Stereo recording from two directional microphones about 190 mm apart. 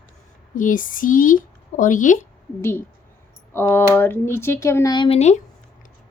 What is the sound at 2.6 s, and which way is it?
Speech, 15° left (ahead or behind).